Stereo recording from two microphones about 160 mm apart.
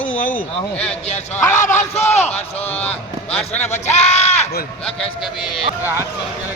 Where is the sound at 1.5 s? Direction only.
50° left (ahead or behind).